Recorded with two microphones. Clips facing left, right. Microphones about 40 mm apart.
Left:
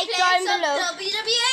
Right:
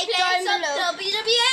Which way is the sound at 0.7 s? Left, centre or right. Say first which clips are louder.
Right 1 dB; centre.